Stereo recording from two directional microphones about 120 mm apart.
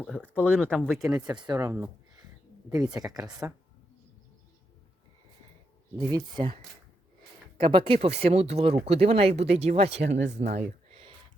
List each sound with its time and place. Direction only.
0.6 s speech: centre (ahead or behind)
1.1 s speech: 35° right (ahead or behind)
3.4 s speech: 15° right (ahead or behind)
6.0 s speech: 30° right (ahead or behind)
7.6 s speech: 45° right (ahead or behind); by 10.4 s 65° right (ahead or behind)